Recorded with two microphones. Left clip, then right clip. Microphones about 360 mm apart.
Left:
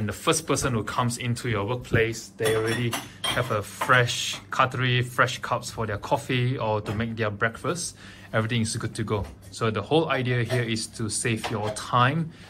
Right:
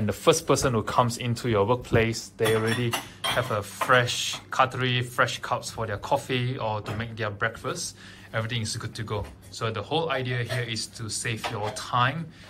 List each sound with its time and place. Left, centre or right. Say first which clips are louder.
0.0 s speech: right 3 dB; centre
3.3 s speech: even; centre